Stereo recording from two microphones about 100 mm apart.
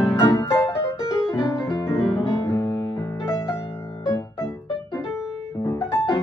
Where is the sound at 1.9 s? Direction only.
5° right (ahead or behind).